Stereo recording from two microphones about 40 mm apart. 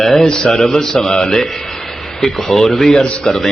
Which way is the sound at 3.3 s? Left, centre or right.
Left.